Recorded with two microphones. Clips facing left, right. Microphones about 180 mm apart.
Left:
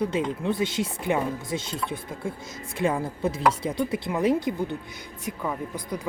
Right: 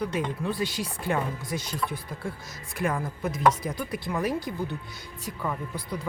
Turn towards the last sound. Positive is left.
turn(degrees=15)  # may be behind; listen again after turning